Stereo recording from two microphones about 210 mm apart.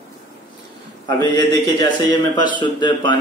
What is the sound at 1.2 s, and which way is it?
Speech, 20° left (ahead or behind).